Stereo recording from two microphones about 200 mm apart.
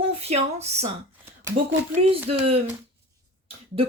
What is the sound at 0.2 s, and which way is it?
Speech, 30° right (ahead or behind).